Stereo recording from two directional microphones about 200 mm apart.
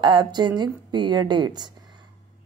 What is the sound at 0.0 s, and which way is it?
Speech, 25° right (ahead or behind).